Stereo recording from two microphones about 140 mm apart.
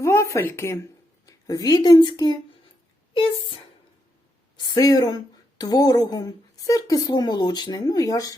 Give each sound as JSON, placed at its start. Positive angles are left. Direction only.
{"t": 0.0, "sound": "speech", "side_deg": 20}
{"t": 4.6, "sound": "speech", "side_deg": 30}